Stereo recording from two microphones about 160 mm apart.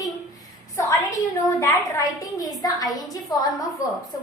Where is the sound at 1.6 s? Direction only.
20° left (ahead or behind).